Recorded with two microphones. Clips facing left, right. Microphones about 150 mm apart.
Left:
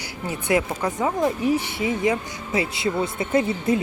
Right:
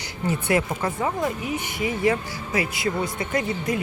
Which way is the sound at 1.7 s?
25° left (ahead or behind).